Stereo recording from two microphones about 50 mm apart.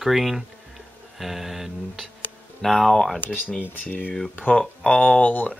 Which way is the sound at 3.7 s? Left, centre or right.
Left.